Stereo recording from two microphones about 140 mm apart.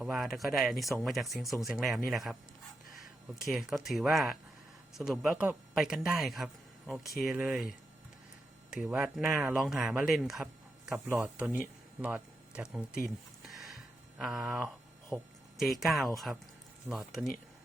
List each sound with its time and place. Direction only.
0.0 s speech: centre (ahead or behind)
3.4 s speech: centre (ahead or behind)
8.7 s speech: 10° right (ahead or behind)
9.6 s speech: 5° right (ahead or behind)
13.5 s music: centre (ahead or behind)
14.2 s speech: 5° right (ahead or behind)